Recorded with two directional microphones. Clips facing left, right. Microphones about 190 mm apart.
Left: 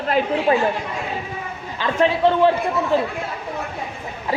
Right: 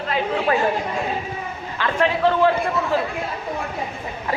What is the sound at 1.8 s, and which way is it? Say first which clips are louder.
Speech: left 2 dB; 20° left (ahead or behind).